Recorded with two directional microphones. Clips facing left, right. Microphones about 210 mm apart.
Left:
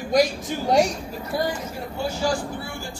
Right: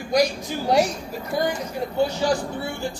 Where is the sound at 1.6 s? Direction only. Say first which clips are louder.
Right 5 dB; 20° right (ahead or behind).